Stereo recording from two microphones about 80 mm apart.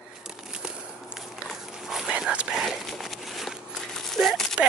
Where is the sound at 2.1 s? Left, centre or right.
Centre.